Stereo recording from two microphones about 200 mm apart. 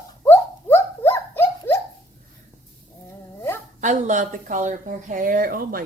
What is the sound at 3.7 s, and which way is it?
Speech, 40° right (ahead or behind).